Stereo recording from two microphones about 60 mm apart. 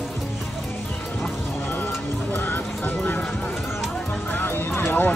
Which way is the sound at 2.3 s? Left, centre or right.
Left.